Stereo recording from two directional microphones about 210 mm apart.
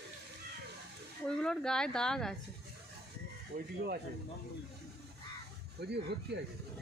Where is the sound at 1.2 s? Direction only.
5° left (ahead or behind).